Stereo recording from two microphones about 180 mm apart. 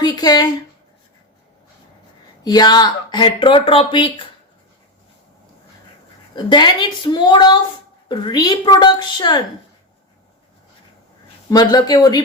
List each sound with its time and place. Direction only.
0.0 s speech: 20° left (ahead or behind)
2.4 s speech: 20° left (ahead or behind)
6.3 s speech: 25° left (ahead or behind)
11.4 s speech: 20° left (ahead or behind)